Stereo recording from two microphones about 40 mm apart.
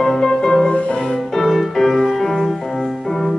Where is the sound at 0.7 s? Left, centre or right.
Left.